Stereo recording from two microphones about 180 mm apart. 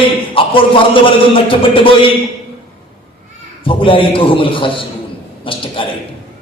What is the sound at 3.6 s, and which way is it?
Music, 30° left (ahead or behind).